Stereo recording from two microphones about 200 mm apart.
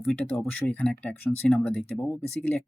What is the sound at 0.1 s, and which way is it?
Speech, 10° left (ahead or behind).